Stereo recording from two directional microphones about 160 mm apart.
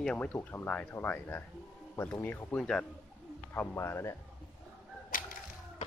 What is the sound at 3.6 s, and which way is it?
Speech, 15° left (ahead or behind).